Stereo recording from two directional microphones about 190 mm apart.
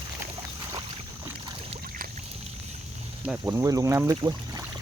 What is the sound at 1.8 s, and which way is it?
Boat, 50° right (ahead or behind).